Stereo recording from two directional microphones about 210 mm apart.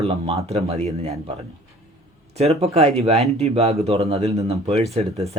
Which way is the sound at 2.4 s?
30° right (ahead or behind).